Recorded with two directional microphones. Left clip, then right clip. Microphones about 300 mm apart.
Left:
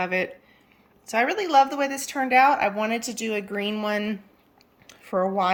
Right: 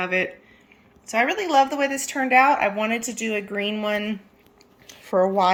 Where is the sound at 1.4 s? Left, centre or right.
Centre.